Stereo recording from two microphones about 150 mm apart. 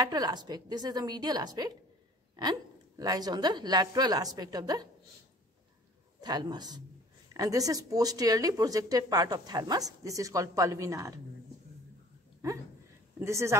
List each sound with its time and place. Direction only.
0.0 s speech: 25° right (ahead or behind)
3.0 s speech: 25° right (ahead or behind)
6.2 s speech: 25° right (ahead or behind)
13.2 s speech: 20° right (ahead or behind)